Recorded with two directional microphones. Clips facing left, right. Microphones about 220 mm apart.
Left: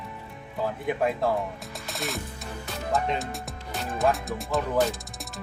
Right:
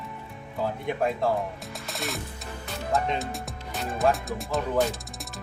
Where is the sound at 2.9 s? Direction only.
Centre (ahead or behind).